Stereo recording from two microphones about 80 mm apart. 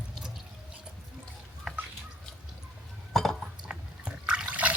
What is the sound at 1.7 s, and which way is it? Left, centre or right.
Drip, centre.